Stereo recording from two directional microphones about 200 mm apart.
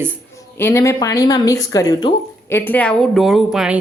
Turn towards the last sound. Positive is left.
turn(degrees=0)  # may be behind; listen again after turning